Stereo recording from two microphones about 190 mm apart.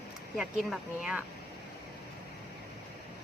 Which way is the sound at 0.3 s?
Centre (ahead or behind).